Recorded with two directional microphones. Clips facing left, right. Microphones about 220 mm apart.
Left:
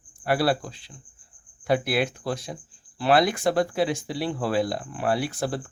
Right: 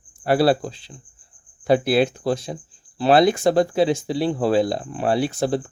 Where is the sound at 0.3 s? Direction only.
25° right (ahead or behind).